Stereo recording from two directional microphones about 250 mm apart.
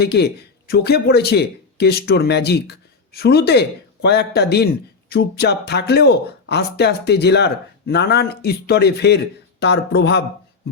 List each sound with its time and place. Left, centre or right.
0.0 s speech: left